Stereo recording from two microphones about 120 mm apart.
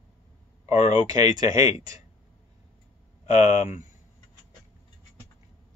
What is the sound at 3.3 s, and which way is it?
Speech, 70° left (ahead or behind).